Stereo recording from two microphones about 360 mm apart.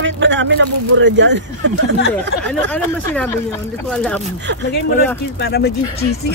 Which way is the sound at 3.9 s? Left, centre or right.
Centre.